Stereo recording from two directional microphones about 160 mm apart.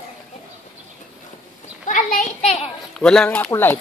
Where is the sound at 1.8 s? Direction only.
55° left (ahead or behind).